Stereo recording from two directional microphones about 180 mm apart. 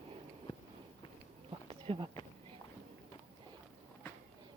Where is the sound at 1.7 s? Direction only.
30° right (ahead or behind).